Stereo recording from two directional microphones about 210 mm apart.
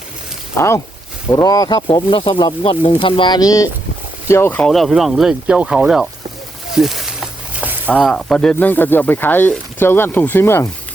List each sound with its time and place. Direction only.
1.3 s speech: 15° left (ahead or behind); by 6.1 s 5° right (ahead or behind)
6.7 s a sound: centre (ahead or behind)
7.9 s speech: 5° left (ahead or behind)